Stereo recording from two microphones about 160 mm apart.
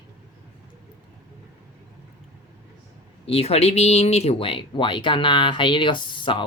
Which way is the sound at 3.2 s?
40° left (ahead or behind).